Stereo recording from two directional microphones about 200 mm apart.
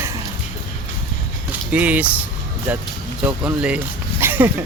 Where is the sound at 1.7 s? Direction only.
5° right (ahead or behind).